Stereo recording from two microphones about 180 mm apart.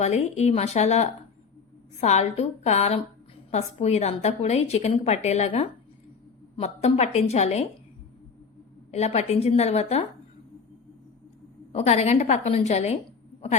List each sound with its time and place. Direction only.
0.0 s a woman's voice: 35° left (ahead or behind)
8.9 s a woman's voice: 35° left (ahead or behind)
11.7 s a woman's voice: 35° left (ahead or behind)